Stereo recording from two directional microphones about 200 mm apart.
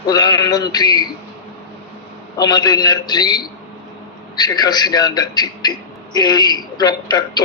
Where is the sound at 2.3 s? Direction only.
20° left (ahead or behind).